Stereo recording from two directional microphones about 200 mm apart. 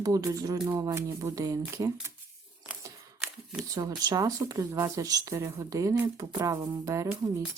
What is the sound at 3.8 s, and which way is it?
Speech, 20° right (ahead or behind).